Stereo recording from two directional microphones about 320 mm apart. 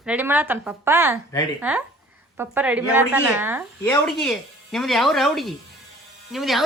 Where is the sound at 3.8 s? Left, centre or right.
Centre.